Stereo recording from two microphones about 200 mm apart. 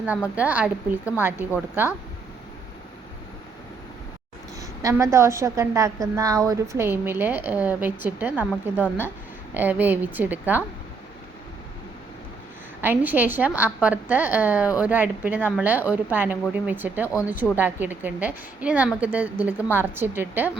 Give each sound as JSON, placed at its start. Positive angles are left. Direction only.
{"t": 0.3, "sound": "a woman's voice", "side_deg": -5}
{"t": 4.6, "sound": "a woman's voice", "side_deg": -15}
{"t": 12.8, "sound": "a woman's voice", "side_deg": -10}